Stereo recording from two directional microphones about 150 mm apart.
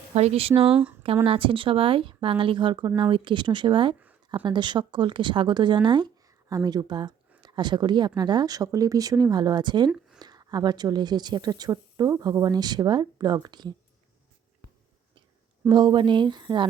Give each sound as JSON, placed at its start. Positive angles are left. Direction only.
{"t": 0.1, "sound": "speech", "side_deg": -45}
{"t": 15.7, "sound": "speech", "side_deg": -30}